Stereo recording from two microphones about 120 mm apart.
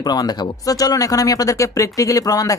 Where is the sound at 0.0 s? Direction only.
35° left (ahead or behind).